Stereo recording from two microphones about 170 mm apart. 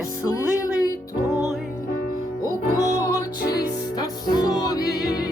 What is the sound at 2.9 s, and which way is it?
Music, 20° left (ahead or behind).